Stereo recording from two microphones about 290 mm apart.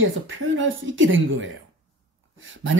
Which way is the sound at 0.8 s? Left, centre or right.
Right.